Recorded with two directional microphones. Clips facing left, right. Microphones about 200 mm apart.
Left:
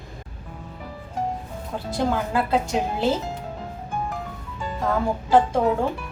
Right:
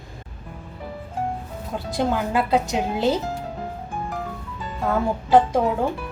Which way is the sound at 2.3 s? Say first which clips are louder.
Right 1 dB; 20° right (ahead or behind).